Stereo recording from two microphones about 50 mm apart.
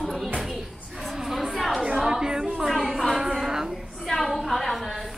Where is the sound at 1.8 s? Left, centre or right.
Centre.